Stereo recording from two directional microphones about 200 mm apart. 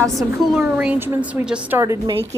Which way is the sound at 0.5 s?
5° right (ahead or behind).